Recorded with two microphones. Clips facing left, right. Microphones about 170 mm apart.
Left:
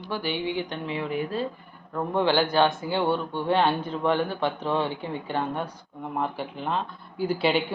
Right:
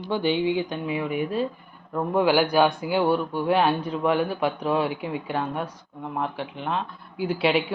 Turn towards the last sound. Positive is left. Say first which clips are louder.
# right 1 dB
turn(degrees=-5)  # may be behind; listen again after turning